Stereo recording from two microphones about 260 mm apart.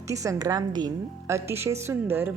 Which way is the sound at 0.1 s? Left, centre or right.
Centre.